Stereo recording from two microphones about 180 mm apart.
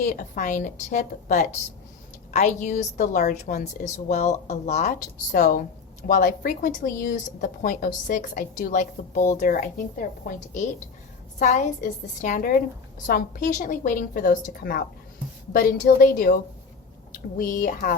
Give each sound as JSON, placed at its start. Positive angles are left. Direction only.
{"t": 0.0, "sound": "a woman's voice", "side_deg": 45}
{"t": 11.3, "sound": "a woman's voice", "side_deg": 45}